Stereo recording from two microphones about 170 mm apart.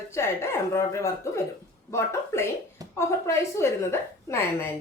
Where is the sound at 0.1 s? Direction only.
15° left (ahead or behind).